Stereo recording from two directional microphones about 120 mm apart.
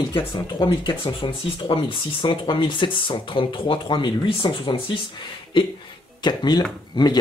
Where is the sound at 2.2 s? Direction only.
45° left (ahead or behind).